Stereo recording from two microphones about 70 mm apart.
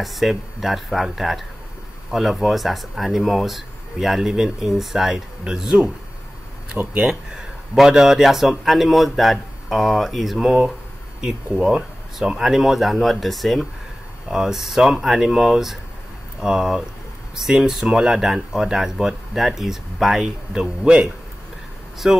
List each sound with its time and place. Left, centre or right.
0.0 s a man's voice: centre
7.0 s a man's voice: centre
11.5 s a man's voice: centre